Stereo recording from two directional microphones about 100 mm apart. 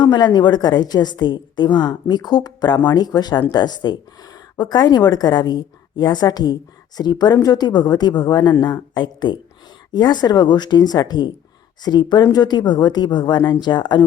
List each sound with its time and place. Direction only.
0.0 s speech: 45° left (ahead or behind)